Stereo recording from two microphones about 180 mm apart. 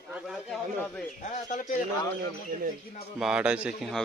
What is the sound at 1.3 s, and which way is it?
Speech, 45° left (ahead or behind).